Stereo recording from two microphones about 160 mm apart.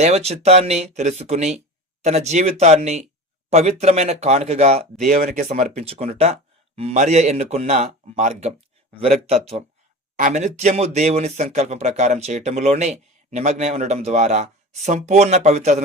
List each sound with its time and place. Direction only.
0.0 s speech: 40° right (ahead or behind)